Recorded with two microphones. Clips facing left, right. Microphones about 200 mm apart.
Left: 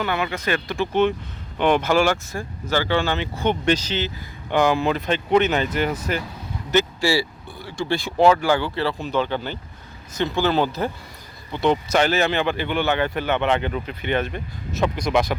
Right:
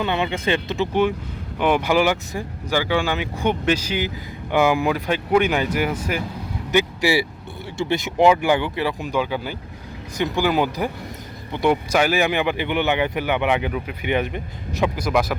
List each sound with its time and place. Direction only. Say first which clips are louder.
0.0 s speech: right 2 dB; 25° right (ahead or behind)
1.5 s speech: even; 10° right (ahead or behind)